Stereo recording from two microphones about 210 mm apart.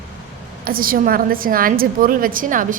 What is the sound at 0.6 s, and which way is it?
A woman's voice, 45° right (ahead or behind).